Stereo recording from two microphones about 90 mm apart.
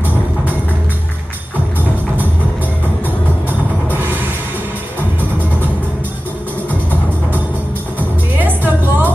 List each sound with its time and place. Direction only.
8.4 s music: 20° right (ahead or behind)